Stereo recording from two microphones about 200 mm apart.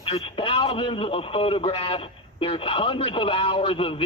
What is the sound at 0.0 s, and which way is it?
Speech, 30° left (ahead or behind).